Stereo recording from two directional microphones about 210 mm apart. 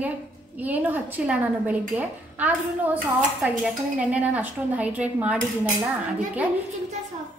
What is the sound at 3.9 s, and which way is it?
A woman's voice, 5° right (ahead or behind).